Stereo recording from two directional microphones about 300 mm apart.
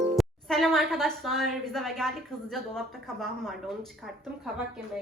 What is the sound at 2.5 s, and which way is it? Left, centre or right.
Speech, centre.